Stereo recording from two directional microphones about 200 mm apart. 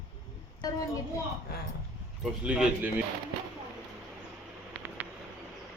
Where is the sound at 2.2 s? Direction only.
5° right (ahead or behind).